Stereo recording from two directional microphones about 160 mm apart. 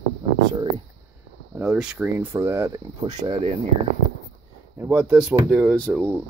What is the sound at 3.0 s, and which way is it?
Speech, 30° right (ahead or behind).